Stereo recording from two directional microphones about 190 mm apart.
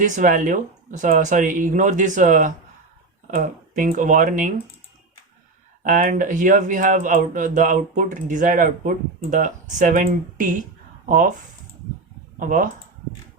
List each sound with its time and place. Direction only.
0.0 s speech: 45° right (ahead or behind)
5.8 s speech: 45° right (ahead or behind)
12.4 s speech: 45° right (ahead or behind)